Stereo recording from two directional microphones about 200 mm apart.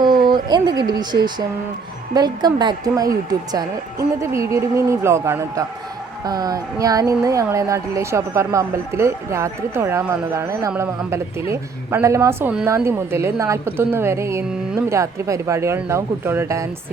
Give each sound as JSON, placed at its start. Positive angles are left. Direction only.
{"t": 0.0, "sound": "a woman's voice", "side_deg": -20}